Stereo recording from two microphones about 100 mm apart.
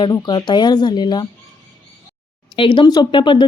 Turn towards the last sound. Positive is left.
turn(degrees=50)  # may be behind; listen again after turning